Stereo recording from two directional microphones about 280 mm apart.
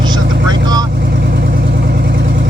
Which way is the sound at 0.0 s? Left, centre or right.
Centre.